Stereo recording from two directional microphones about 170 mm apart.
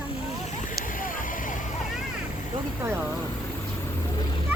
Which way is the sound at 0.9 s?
50° left (ahead or behind).